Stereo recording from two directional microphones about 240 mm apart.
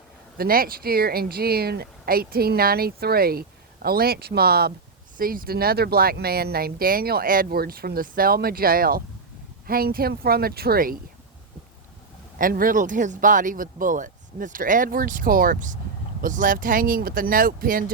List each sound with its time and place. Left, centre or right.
0.3 s speech: right
12.4 s speech: right